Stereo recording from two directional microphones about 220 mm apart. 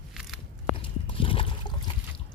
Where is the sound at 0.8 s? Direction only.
25° left (ahead or behind).